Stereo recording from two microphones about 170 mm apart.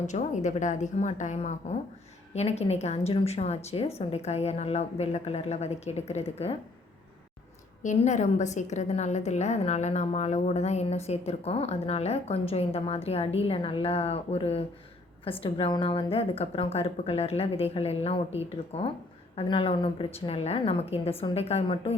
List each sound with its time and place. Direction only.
0.1 s a woman's voice: 45° left (ahead or behind)
7.8 s a woman's voice: 45° left (ahead or behind)